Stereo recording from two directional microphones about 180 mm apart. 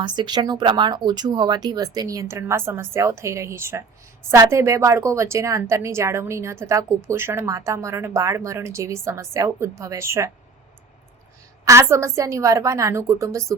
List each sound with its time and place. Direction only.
0.0 s a woman's voice: 25° right (ahead or behind)
11.6 s a woman's voice: 15° right (ahead or behind)